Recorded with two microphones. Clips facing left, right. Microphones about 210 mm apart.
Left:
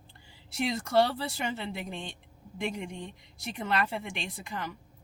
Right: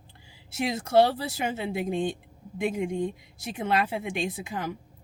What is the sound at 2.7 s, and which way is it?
Speech, 50° right (ahead or behind).